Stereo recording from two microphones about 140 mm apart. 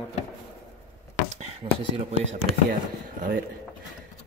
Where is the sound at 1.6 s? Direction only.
45° right (ahead or behind).